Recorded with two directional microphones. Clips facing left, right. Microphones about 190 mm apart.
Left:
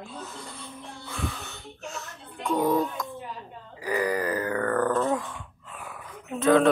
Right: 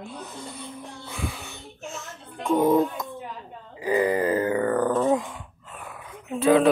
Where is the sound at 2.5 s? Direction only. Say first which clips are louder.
Right 4 dB; 20° right (ahead or behind).